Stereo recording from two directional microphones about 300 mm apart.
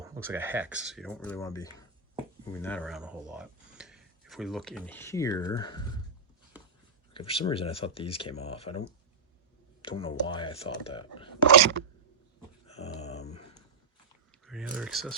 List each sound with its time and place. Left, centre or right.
0.0 s speech: centre
7.1 s speech: centre
9.8 s speech: centre
12.6 s a sound: left
14.4 s speech: centre